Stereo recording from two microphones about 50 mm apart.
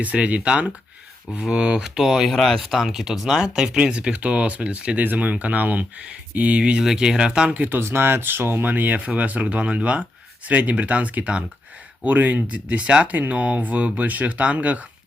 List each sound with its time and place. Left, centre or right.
0.0 s speech: right
2.0 s speech: centre
2.3 s speech: centre
7.5 s speech: right
7.8 s speech: right
8.6 s speech: right
12.0 s speech: right